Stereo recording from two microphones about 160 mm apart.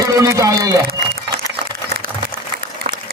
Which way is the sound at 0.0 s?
20° right (ahead or behind).